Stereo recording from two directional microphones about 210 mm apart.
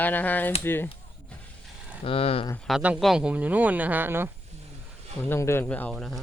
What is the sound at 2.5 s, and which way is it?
Speech, centre (ahead or behind).